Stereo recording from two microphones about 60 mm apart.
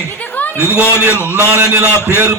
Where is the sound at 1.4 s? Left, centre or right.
Right.